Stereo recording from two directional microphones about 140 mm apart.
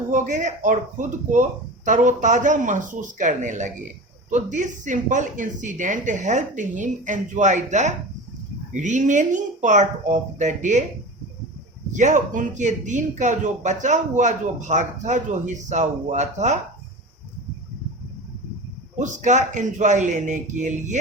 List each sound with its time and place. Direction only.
0.1 s speech: 65° right (ahead or behind)
11.9 s speech: 60° right (ahead or behind)
18.9 s speech: 60° right (ahead or behind)